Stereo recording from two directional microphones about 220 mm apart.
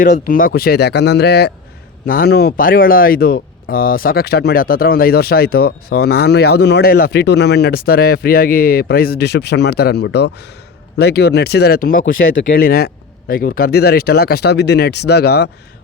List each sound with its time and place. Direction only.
0.0 s speech: 40° left (ahead or behind)